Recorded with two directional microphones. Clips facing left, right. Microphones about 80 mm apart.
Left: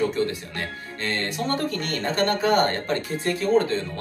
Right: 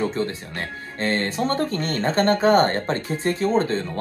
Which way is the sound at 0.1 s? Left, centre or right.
Right.